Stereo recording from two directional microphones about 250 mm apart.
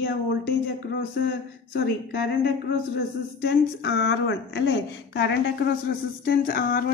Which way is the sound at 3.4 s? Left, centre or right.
Left.